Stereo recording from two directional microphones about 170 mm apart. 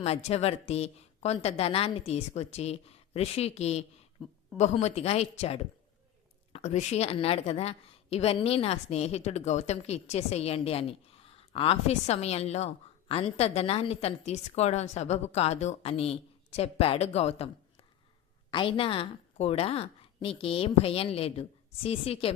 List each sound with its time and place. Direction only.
0.0 s a woman's voice: 40° left (ahead or behind)
18.5 s a woman's voice: 30° left (ahead or behind)